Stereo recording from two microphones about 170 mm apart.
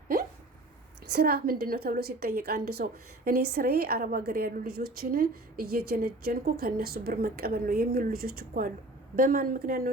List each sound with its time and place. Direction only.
1.1 s a woman's voice: 65° right (ahead or behind)